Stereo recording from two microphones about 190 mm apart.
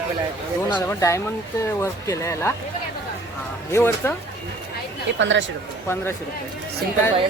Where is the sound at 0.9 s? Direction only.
15° left (ahead or behind).